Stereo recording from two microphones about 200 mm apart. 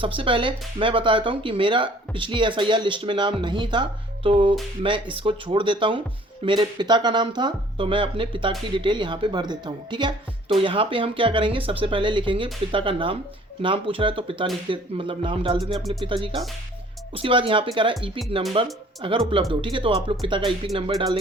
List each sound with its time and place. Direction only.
0.0 s speech: 25° right (ahead or behind)